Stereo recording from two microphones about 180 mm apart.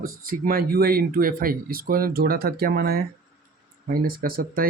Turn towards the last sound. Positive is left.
turn(degrees=-55)  # may be behind; listen again after turning